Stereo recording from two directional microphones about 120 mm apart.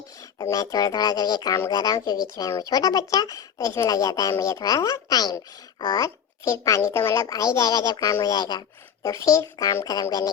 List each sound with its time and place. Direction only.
0.2 s speech: 30° left (ahead or behind)